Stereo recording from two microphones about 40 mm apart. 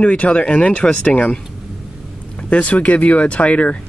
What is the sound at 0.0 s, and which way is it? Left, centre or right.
Speech, left.